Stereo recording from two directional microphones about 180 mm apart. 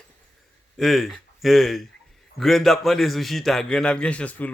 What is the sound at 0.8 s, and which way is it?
Speech, centre (ahead or behind).